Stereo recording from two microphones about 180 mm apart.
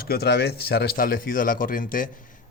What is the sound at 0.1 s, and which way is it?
Speech, 60° left (ahead or behind).